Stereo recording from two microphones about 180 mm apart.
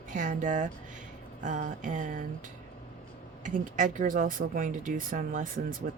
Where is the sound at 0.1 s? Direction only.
45° right (ahead or behind).